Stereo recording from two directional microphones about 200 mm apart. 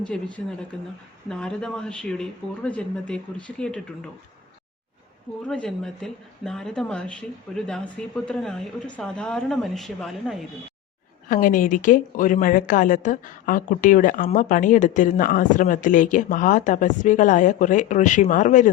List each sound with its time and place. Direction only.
1.3 s speech: 5° left (ahead or behind)
5.5 s speech: 5° left (ahead or behind)
11.3 s a woman's voice: 45° left (ahead or behind)